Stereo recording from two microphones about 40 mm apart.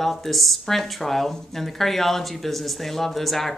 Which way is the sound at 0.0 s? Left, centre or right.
Centre.